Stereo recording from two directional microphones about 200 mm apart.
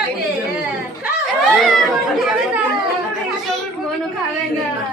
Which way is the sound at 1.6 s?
Centre (ahead or behind).